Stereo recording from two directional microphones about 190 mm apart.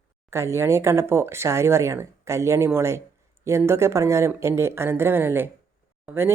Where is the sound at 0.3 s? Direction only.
15° right (ahead or behind).